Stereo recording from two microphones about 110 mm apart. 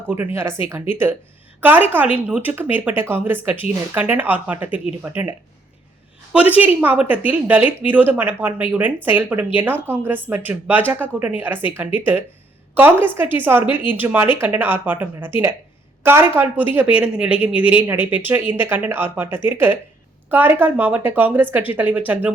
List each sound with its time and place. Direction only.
0.3 s a woman's voice: 25° right (ahead or behind)
6.3 s a woman's voice: 15° right (ahead or behind)